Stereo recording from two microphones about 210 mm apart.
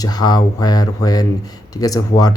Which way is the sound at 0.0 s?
20° left (ahead or behind).